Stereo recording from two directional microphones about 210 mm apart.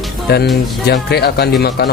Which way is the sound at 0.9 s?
50° left (ahead or behind).